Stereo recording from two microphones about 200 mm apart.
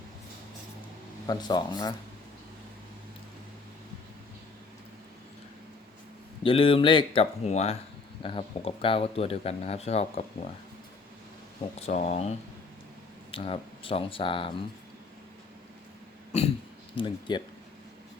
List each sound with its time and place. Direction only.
1.3 s speech: 20° left (ahead or behind)
6.4 s speech: 25° left (ahead or behind)
11.8 s speech: 35° left (ahead or behind)
13.3 s speech: 25° left (ahead or behind)
16.9 s speech: 25° left (ahead or behind)